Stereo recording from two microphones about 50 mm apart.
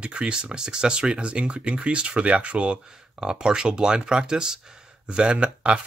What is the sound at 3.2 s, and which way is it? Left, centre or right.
Speech, centre.